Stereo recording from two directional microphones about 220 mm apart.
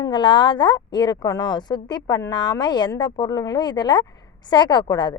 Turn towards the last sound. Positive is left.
turn(degrees=20)  # may be behind; listen again after turning